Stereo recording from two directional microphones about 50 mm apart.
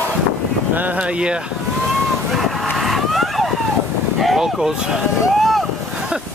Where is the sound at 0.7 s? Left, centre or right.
Right.